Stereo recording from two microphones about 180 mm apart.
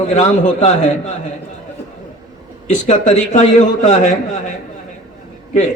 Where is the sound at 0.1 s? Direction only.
45° left (ahead or behind).